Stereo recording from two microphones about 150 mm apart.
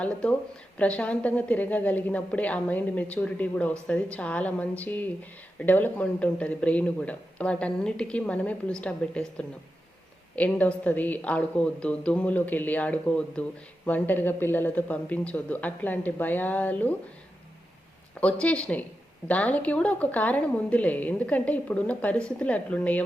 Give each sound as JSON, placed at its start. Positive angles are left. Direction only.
{"t": 0.0, "sound": "a woman's voice", "side_deg": 5}
{"t": 10.3, "sound": "a woman's voice", "side_deg": 10}
{"t": 18.2, "sound": "a woman's voice", "side_deg": 10}